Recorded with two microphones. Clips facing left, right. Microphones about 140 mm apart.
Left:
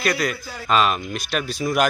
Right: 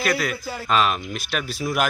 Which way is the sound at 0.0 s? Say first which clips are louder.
Left 1 dB; 5° right (ahead or behind).